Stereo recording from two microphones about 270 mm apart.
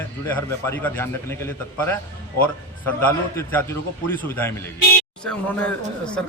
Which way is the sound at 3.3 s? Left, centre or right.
Centre.